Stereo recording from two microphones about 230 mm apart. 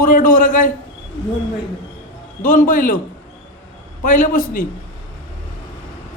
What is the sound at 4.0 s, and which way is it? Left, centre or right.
Speech, left.